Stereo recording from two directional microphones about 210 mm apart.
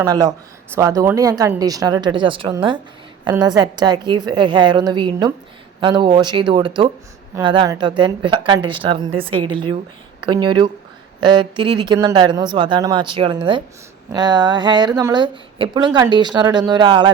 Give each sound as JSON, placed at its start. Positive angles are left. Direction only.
{"t": 0.0, "sound": "a woman's voice", "side_deg": -15}